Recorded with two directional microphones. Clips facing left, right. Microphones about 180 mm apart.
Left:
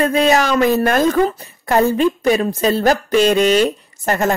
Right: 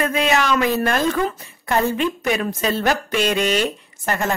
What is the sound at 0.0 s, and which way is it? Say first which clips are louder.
A woman's voice: left 5 dB; 35° left (ahead or behind).